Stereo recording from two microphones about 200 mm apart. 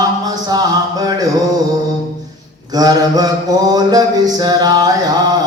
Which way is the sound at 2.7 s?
20° right (ahead or behind).